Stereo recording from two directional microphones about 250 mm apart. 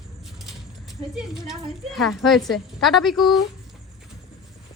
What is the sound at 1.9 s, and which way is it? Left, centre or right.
A woman's voice, centre.